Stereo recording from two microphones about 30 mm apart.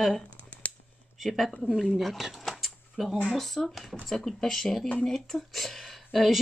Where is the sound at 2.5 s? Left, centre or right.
Centre.